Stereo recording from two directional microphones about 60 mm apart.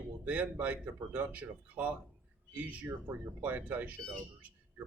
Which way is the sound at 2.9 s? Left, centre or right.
Right.